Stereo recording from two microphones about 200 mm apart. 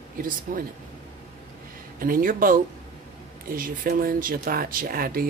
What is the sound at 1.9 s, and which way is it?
Speech, 45° right (ahead or behind).